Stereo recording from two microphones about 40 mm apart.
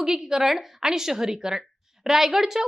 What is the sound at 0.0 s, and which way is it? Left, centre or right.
Speech, centre.